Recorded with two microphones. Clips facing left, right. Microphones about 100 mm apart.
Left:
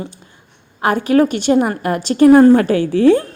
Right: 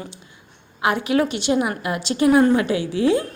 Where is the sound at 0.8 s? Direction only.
45° left (ahead or behind).